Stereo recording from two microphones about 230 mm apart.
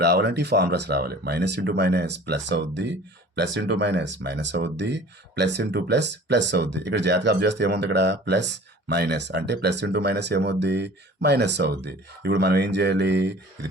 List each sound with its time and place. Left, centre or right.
0.0 s speech: right